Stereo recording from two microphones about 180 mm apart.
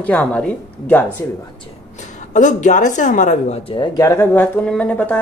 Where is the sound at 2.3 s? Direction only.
45° left (ahead or behind).